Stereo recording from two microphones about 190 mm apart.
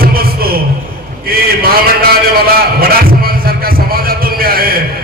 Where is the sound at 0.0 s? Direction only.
50° right (ahead or behind).